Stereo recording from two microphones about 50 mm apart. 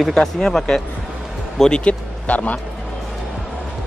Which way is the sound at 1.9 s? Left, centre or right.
Left.